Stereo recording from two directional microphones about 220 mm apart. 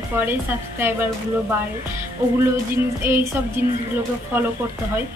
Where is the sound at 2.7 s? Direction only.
10° right (ahead or behind).